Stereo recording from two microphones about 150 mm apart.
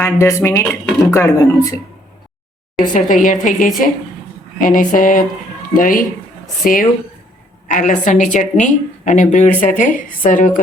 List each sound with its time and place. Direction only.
0.0 s speech: 20° left (ahead or behind)
2.9 s a woman's voice: 60° left (ahead or behind)